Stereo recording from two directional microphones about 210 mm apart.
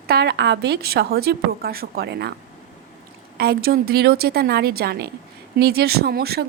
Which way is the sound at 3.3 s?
50° right (ahead or behind).